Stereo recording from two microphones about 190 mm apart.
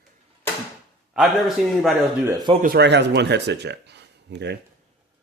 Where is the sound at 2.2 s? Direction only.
20° right (ahead or behind).